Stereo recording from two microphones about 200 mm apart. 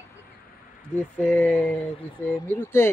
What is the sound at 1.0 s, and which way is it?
Speech, 10° left (ahead or behind).